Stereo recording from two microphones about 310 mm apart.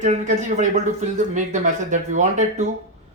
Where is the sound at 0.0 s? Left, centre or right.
Right.